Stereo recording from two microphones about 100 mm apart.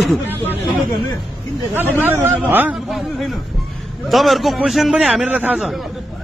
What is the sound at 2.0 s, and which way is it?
Speech, 20° right (ahead or behind).